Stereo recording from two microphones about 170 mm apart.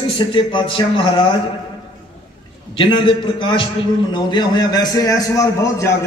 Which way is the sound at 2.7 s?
30° left (ahead or behind).